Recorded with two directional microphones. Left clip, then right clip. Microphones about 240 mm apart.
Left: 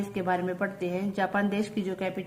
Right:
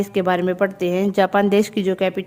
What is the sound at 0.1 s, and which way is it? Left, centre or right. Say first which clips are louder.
A woman's voice: right 8 dB; right.